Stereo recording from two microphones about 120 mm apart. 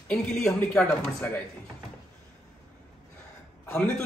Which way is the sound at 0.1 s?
5° left (ahead or behind).